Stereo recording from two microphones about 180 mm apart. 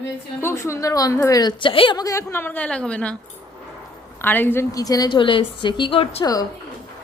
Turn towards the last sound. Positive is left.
turn(degrees=20)  # may be behind; listen again after turning